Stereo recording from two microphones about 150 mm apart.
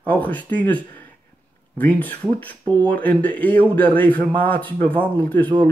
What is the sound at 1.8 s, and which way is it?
Speech, 10° left (ahead or behind).